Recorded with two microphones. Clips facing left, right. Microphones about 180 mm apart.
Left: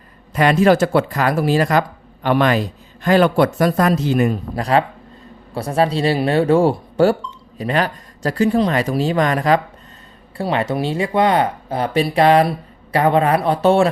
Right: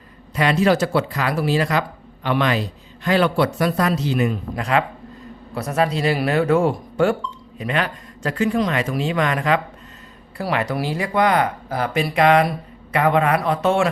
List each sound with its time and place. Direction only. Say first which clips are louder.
0.3 s a man's voice: left 4 dB; 50° left (ahead or behind)
4.5 s speech: left 4 dB; 35° left (ahead or behind)
10.3 s speech: left 3 dB; 25° left (ahead or behind)